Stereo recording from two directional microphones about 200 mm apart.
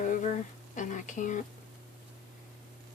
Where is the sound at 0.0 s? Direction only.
40° left (ahead or behind).